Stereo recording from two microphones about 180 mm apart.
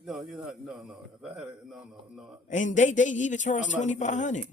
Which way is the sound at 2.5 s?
45° left (ahead or behind).